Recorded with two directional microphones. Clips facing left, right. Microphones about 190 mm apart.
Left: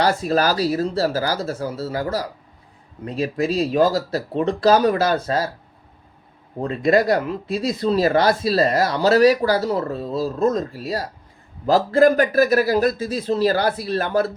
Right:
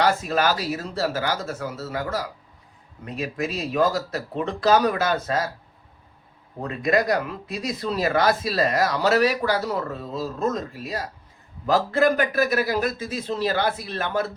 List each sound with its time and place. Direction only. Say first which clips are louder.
0.0 s speech: left 3 dB; 35° left (ahead or behind)
6.6 s speech: left 5 dB; 30° left (ahead or behind)